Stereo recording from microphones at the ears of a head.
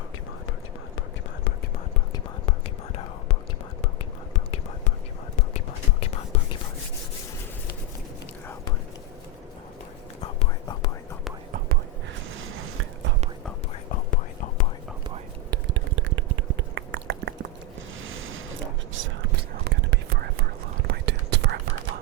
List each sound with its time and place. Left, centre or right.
2.1 s whispering: left
5.4 s whispering: left
10.2 s whispering: left
12.4 s a sound: right
13.9 s whispering: left
15.1 s a sound: right
18.9 s whispering: right